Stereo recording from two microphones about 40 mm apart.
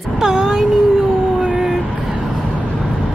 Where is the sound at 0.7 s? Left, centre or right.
Centre.